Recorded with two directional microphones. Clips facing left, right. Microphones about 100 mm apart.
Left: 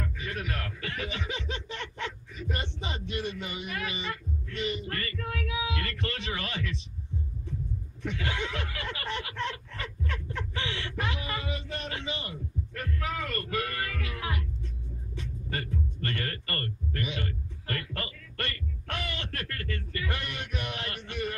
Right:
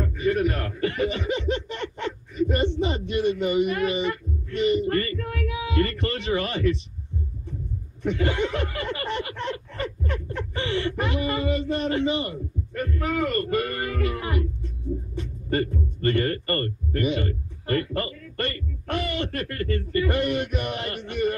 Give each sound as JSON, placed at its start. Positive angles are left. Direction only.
{"t": 0.0, "sound": "speech", "side_deg": -45}
{"t": 8.0, "sound": "a man's voice", "side_deg": -40}
{"t": 13.2, "sound": "a man's voice", "side_deg": -35}